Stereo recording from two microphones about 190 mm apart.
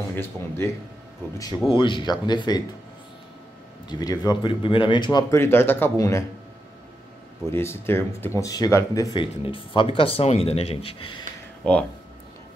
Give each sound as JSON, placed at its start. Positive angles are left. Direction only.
{"t": 0.1, "sound": "speech", "side_deg": 10}
{"t": 1.7, "sound": "speech", "side_deg": 25}
{"t": 3.9, "sound": "speech", "side_deg": 20}
{"t": 7.4, "sound": "speech", "side_deg": 15}